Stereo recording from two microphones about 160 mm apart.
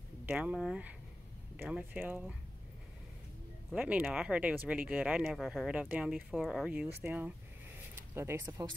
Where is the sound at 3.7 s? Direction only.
10° right (ahead or behind).